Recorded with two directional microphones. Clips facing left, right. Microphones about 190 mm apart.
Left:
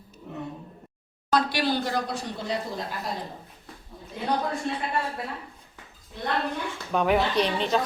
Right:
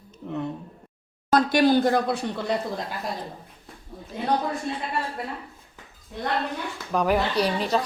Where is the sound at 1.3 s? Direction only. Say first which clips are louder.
Right 6 dB; 45° right (ahead or behind).